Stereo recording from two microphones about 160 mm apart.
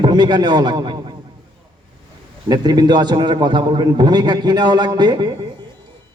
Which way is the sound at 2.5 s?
25° right (ahead or behind).